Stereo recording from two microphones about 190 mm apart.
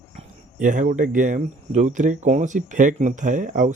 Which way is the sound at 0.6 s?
40° right (ahead or behind).